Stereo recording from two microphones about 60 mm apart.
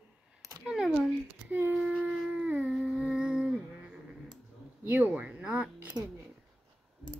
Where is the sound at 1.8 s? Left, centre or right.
Centre.